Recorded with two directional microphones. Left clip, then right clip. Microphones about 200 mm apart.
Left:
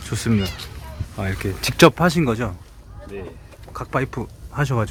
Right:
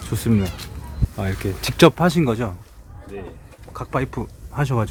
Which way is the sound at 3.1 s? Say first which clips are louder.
Left 1 dB; 60° left (ahead or behind).